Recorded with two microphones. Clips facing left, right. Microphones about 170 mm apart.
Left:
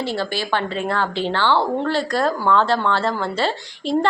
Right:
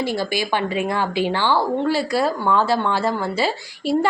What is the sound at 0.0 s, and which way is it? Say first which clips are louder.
A woman's voice: right 1 dB; 10° right (ahead or behind).